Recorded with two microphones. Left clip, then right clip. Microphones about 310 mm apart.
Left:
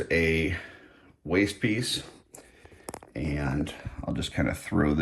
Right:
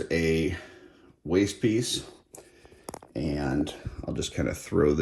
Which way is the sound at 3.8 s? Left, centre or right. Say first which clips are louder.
Even; right.